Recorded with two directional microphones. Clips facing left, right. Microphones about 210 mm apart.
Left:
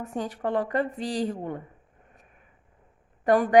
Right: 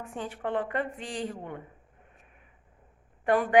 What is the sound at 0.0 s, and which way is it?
A woman's voice, 40° left (ahead or behind).